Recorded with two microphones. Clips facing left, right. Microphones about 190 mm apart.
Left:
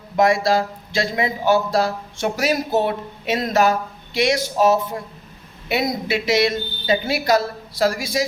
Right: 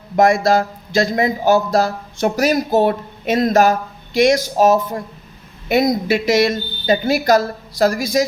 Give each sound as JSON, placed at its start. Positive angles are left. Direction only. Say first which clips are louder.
{"t": 0.2, "sound": "speech", "louder": "right 3 dB", "side_deg": -45}